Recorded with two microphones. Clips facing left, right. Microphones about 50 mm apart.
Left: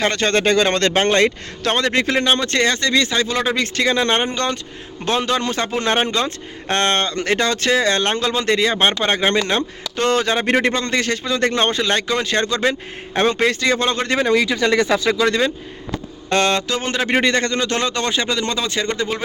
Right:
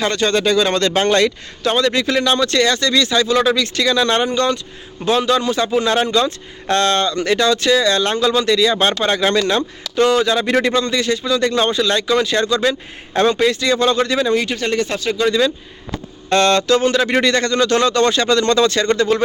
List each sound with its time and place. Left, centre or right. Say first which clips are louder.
0.0 s speech: right 1 dB; left
1.6 s speech: right 2 dB; left
8.7 s speech: right 1 dB; left
16.3 s speech: right 4 dB; left